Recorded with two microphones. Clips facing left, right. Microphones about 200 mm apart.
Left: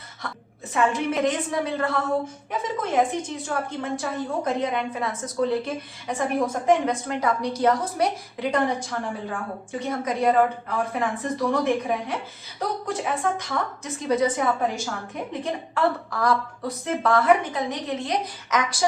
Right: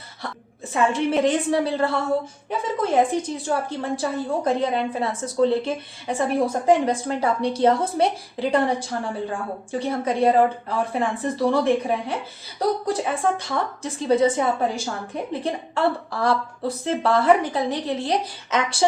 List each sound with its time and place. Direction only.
0.7 s a woman's voice: 30° right (ahead or behind)